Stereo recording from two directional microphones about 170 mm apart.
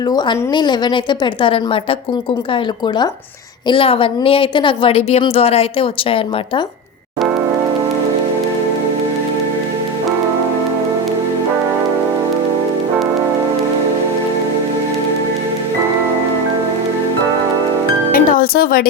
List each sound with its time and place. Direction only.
0.1 s a woman's voice: 25° left (ahead or behind)
18.1 s music: 60° left (ahead or behind)